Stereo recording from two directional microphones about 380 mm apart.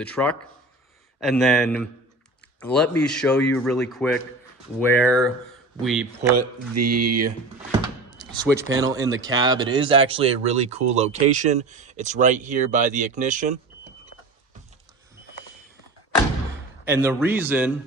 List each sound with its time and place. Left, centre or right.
0.0 s speech: centre
6.3 s speech: right
8.2 s speech: centre
16.8 s speech: centre